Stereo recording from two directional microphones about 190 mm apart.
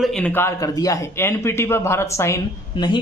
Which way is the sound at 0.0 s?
5° left (ahead or behind).